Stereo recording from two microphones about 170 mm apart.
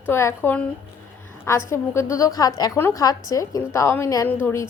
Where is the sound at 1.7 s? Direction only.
15° left (ahead or behind).